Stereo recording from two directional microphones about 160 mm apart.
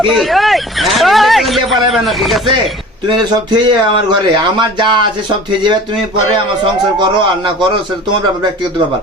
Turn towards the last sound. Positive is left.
turn(degrees=-30)  # may be behind; listen again after turning